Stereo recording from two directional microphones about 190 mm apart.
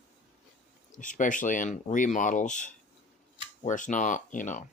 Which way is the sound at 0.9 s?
40° left (ahead or behind).